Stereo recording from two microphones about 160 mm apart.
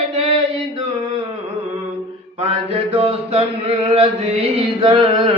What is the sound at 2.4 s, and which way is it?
Mantra, 35° right (ahead or behind).